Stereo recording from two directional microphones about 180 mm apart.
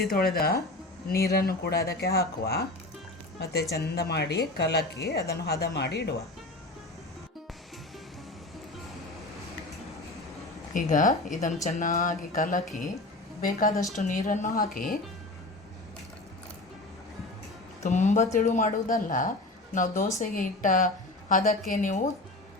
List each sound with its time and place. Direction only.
0.1 s speech: 55° left (ahead or behind)
10.8 s speech: 45° left (ahead or behind)
17.8 s a woman's voice: 40° left (ahead or behind)